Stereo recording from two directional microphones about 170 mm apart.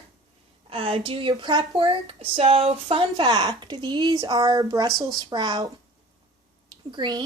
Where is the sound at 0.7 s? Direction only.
30° right (ahead or behind).